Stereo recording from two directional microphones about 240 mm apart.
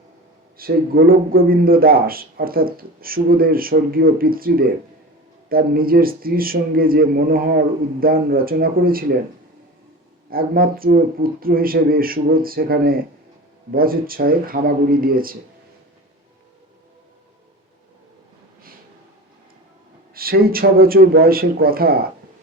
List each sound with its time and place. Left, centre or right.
0.5 s a man's voice: right
10.2 s a man's voice: right
20.1 s a man's voice: right